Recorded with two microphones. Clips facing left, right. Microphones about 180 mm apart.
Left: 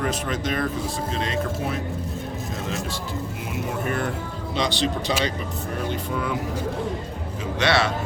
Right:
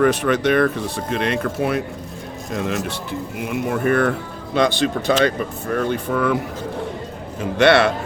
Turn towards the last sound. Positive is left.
turn(degrees=-60)  # may be behind; listen again after turning